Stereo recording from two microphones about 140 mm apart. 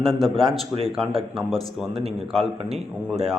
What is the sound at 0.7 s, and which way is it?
Speech, 40° right (ahead or behind).